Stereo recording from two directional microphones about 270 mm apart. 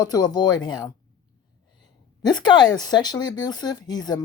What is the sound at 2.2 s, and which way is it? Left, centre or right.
A woman's voice, centre.